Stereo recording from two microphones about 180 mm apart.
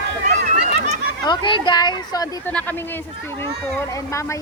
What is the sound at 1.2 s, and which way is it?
Speech, 25° left (ahead or behind).